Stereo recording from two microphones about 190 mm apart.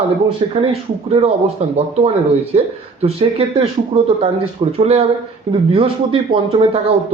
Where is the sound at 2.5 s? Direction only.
35° right (ahead or behind).